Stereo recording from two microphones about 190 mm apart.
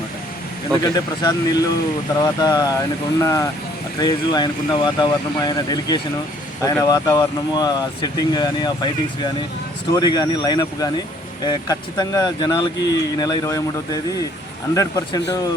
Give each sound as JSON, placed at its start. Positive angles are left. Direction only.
{"t": 0.9, "sound": "speech", "side_deg": 20}